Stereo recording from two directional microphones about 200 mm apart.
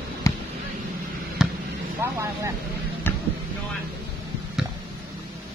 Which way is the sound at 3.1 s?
10° left (ahead or behind).